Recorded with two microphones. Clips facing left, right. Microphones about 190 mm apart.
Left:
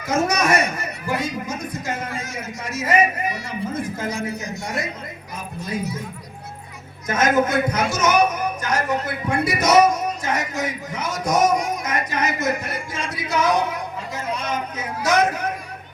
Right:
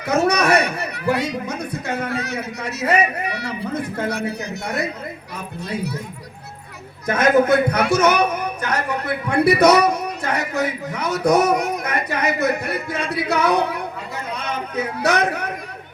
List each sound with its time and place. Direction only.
0.0 s a man's voice: 65° right (ahead or behind)
7.1 s a man's voice: 60° right (ahead or behind)